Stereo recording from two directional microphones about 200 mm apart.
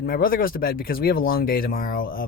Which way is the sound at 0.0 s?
45° left (ahead or behind).